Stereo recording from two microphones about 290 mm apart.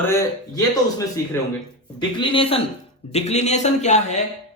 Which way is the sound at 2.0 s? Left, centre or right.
Centre.